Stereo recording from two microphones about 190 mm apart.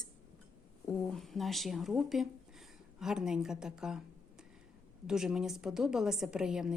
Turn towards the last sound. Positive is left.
turn(degrees=-5)  # may be behind; listen again after turning